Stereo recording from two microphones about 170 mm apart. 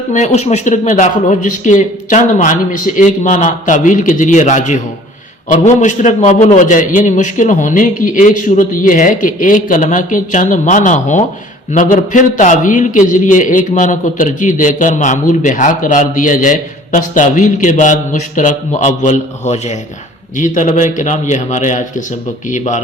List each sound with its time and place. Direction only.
0.1 s a man's voice: 45° left (ahead or behind)